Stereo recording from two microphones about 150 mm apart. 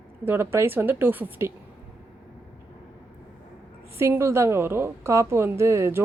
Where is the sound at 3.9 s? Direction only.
15° right (ahead or behind).